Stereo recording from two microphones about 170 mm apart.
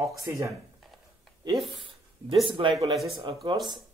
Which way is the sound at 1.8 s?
30° right (ahead or behind).